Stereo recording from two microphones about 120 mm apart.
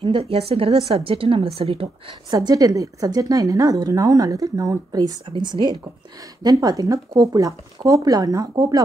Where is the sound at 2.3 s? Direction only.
30° right (ahead or behind).